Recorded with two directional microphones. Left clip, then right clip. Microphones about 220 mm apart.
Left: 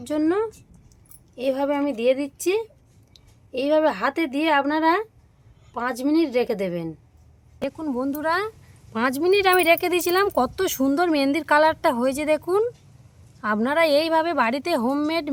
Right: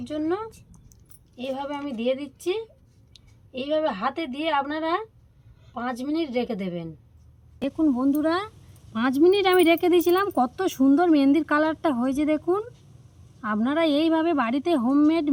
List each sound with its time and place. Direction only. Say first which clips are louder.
0.0 s speech: left 5 dB; 50° left (ahead or behind)
7.6 s speech: right 3 dB; 20° left (ahead or behind)
8.9 s speech: even; 50° left (ahead or behind)